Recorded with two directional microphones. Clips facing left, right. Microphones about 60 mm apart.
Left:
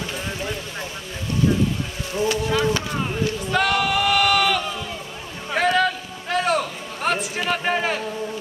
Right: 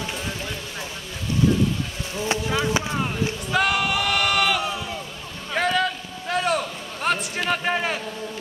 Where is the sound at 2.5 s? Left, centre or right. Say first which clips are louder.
Left 2 dB; centre.